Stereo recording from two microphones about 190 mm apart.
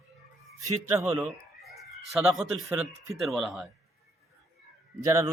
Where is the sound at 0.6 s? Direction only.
15° right (ahead or behind).